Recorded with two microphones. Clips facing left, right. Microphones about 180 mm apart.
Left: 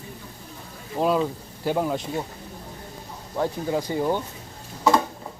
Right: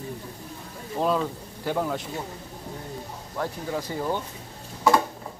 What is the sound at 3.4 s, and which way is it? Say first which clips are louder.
Speech: left 5 dB; 20° left (ahead or behind).